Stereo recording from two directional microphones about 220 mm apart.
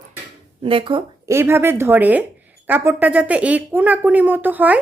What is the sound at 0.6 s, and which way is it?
Speech, 25° right (ahead or behind).